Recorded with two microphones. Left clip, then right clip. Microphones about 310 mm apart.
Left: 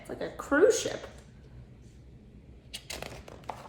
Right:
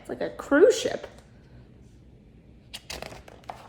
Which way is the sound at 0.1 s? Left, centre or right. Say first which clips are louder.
Right 5 dB; right.